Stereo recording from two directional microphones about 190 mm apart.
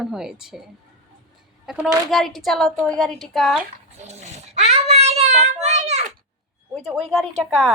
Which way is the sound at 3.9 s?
35° right (ahead or behind).